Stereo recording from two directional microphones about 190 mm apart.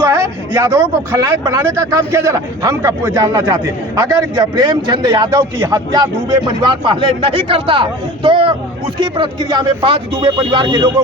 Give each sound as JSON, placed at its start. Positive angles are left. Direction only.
{"t": 0.1, "sound": "a man's voice", "side_deg": -15}